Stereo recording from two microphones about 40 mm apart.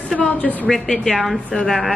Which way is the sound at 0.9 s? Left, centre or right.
Centre.